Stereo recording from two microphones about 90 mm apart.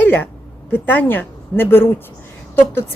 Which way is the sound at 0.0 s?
20° left (ahead or behind).